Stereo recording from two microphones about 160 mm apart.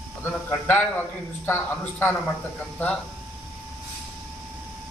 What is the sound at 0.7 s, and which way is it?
A man's voice, 10° left (ahead or behind).